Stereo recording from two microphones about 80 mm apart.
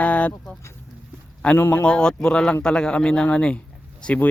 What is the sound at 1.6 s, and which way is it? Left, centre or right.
Speech, left.